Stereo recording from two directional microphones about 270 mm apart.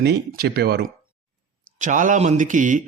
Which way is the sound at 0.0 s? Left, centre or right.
Right.